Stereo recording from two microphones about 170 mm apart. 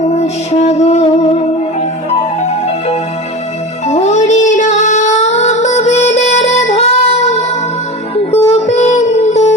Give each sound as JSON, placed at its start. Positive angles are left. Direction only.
{"t": 0.1, "sound": "music", "side_deg": 40}
{"t": 2.4, "sound": "music", "side_deg": 40}
{"t": 8.5, "sound": "music", "side_deg": 40}